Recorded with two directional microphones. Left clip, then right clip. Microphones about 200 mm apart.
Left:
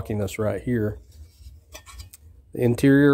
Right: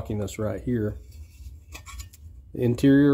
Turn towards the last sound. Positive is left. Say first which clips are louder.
# left 2 dB
turn(degrees=35)  # may be behind; listen again after turning